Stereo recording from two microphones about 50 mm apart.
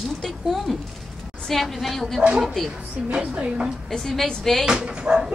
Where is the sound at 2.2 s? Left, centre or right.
Centre.